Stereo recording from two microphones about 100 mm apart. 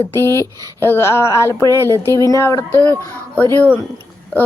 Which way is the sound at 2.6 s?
20° left (ahead or behind).